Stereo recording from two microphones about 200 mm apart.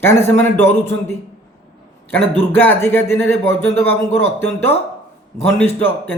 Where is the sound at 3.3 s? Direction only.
60° right (ahead or behind).